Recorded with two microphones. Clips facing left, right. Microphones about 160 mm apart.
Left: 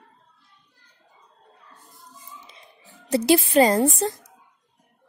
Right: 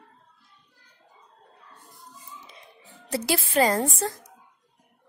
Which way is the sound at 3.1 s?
20° left (ahead or behind).